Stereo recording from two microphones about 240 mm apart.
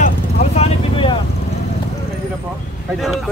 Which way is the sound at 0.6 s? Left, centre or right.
Left.